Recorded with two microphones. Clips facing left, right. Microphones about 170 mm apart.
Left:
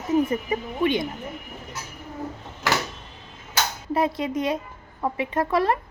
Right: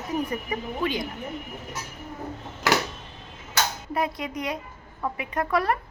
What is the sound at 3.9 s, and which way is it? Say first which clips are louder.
A woman's voice: left 8 dB; 25° left (ahead or behind).